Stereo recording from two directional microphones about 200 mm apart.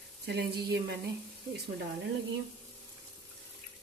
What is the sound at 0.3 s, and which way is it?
Speech, 50° right (ahead or behind).